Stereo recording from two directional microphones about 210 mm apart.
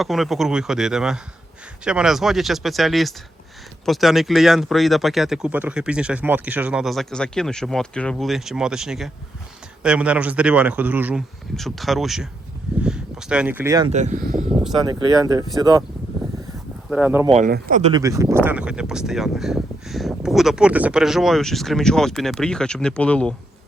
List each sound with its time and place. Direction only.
0.0 s speech: centre (ahead or behind); by 13.9 s 15° right (ahead or behind)
13.9 s speech: 35° right (ahead or behind)
14.8 s speech: 20° right (ahead or behind)
16.9 s speech: 10° right (ahead or behind)
17.2 s speech: 30° right (ahead or behind)
17.9 s speech: 15° right (ahead or behind); by 23.3 s 5° left (ahead or behind)